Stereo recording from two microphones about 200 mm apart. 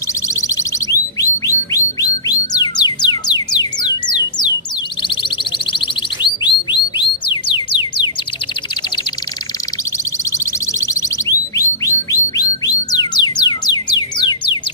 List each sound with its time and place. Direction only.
0.4 s music: 15° left (ahead or behind)
6.2 s music: 25° left (ahead or behind)
10.4 s bird: 15° left (ahead or behind)
12.9 s music: 20° left (ahead or behind)